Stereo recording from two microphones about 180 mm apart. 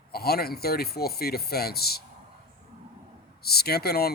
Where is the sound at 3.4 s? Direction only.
60° left (ahead or behind).